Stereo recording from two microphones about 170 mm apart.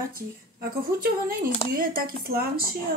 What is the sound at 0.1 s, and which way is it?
Speech, 60° right (ahead or behind).